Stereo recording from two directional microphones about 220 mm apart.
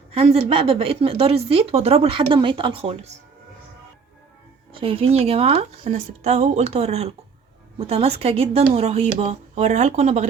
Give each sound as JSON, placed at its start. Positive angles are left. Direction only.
{"t": 0.1, "sound": "a woman's voice", "side_deg": -30}
{"t": 4.7, "sound": "a woman's voice", "side_deg": -25}